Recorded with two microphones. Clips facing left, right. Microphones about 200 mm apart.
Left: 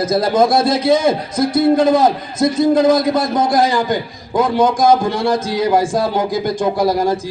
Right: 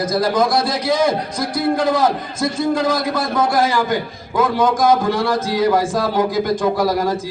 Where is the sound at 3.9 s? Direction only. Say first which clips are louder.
Left 2 dB; 35° left (ahead or behind).